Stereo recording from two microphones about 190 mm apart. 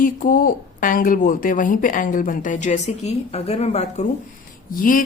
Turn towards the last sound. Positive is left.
turn(degrees=45)  # may be behind; listen again after turning